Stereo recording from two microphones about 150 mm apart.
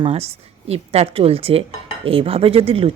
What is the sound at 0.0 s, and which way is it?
A woman's voice, 45° right (ahead or behind).